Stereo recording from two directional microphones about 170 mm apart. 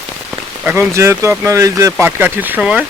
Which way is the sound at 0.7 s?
15° right (ahead or behind).